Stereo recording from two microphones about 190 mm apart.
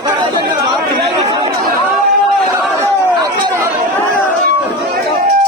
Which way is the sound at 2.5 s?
15° right (ahead or behind).